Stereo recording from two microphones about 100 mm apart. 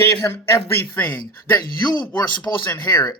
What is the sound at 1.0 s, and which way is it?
Speech, 20° left (ahead or behind).